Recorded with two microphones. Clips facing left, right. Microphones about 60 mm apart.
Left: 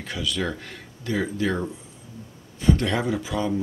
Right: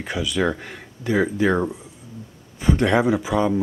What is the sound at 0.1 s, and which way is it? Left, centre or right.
Speech, centre.